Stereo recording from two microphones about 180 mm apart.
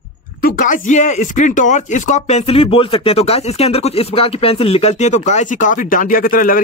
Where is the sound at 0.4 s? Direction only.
50° left (ahead or behind).